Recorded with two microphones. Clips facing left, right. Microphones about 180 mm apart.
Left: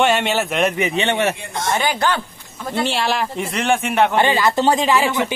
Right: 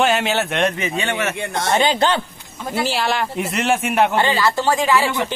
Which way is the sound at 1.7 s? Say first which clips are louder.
Right 2 dB; 20° right (ahead or behind).